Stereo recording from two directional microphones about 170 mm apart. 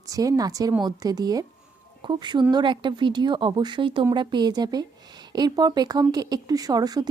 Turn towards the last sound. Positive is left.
turn(degrees=-25)  # may be behind; listen again after turning